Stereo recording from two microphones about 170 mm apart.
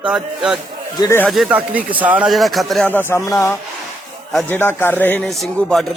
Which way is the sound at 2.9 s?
15° left (ahead or behind).